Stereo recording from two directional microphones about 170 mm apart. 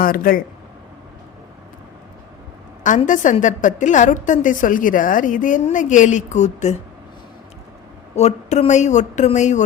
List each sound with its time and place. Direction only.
0.0 s speech: 55° left (ahead or behind)
3.1 s a woman's voice: 50° left (ahead or behind)
8.1 s a woman's voice: 40° left (ahead or behind)